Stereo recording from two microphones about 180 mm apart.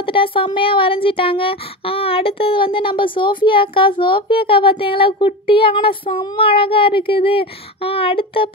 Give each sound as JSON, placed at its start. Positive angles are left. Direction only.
{"t": 0.0, "sound": "speech", "side_deg": 30}